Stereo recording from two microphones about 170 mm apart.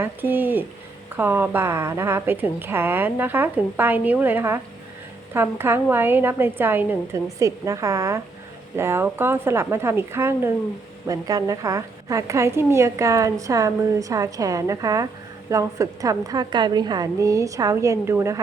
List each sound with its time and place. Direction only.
0.0 s a woman's voice: 10° right (ahead or behind)